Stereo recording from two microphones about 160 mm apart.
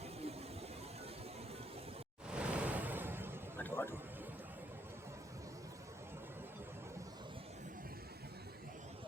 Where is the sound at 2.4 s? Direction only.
10° right (ahead or behind).